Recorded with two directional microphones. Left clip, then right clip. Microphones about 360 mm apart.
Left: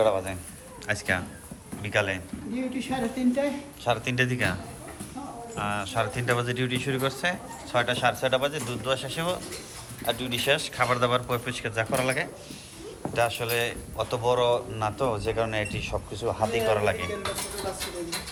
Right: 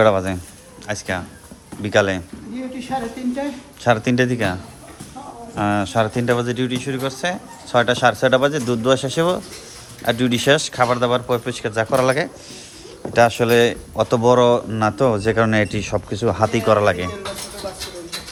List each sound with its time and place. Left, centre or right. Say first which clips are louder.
0.0 s a man's voice: right 8 dB; right
0.9 s speech: right 3 dB; centre
3.8 s speech: right 9 dB; centre
5.5 s a man's voice: right 9 dB; centre